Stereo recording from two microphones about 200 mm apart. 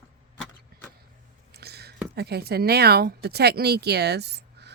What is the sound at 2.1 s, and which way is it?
Speech, 55° right (ahead or behind).